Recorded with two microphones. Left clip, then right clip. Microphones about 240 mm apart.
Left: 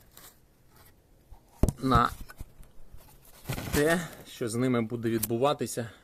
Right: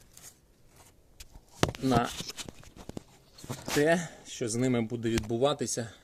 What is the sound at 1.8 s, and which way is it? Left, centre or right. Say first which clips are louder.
Speech: left 5 dB; centre.